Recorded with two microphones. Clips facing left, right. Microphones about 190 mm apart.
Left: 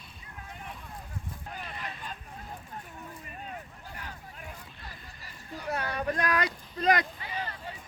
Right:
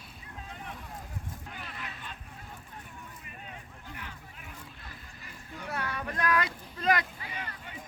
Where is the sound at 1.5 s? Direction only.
40° left (ahead or behind).